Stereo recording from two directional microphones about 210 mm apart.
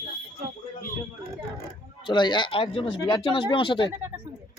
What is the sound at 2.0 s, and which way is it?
Speech, 20° left (ahead or behind).